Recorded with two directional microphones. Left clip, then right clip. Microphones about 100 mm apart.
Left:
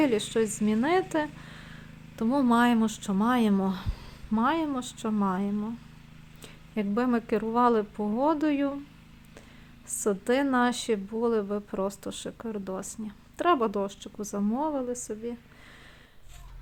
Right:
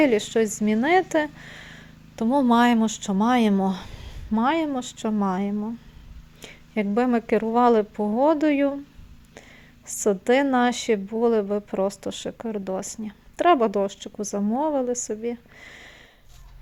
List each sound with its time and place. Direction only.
0.0 s a woman's voice: 15° right (ahead or behind)
3.5 s a sound: 20° right (ahead or behind)
4.4 s a woman's voice: 20° right (ahead or behind)
9.8 s a woman's voice: 20° right (ahead or behind)